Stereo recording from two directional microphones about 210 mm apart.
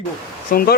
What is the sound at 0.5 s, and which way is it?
Speech, 45° left (ahead or behind).